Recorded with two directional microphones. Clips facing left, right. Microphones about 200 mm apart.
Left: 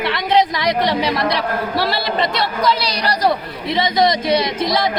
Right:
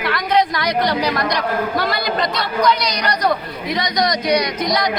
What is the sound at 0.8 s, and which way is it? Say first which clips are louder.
Speech: left 1 dB; centre (ahead or behind).